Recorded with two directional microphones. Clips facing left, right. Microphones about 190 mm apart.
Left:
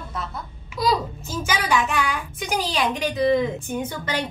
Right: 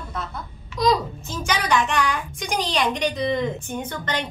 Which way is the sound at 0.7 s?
5° left (ahead or behind).